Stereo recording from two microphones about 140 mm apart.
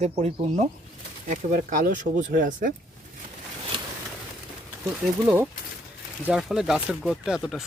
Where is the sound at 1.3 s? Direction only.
70° right (ahead or behind).